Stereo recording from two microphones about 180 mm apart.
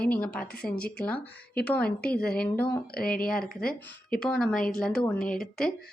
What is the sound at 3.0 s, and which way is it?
Speech, 50° left (ahead or behind).